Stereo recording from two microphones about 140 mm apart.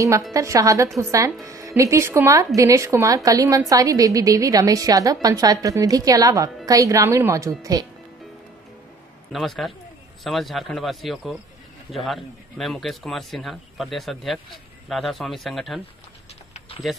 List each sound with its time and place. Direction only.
0.3 s a woman's voice: 25° right (ahead or behind)
9.3 s a man's voice: centre (ahead or behind)
16.5 s a sound: 45° left (ahead or behind)